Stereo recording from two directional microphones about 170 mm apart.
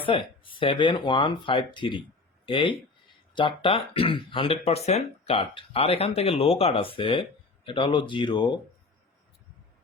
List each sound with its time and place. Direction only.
0.0 s speech: 30° left (ahead or behind)